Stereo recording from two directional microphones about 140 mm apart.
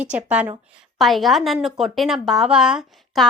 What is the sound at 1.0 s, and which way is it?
Speech, centre (ahead or behind).